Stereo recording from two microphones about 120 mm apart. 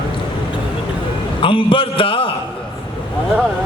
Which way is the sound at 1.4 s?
45° left (ahead or behind).